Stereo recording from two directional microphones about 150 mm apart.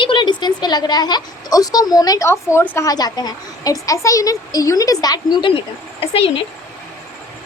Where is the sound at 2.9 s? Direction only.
25° left (ahead or behind).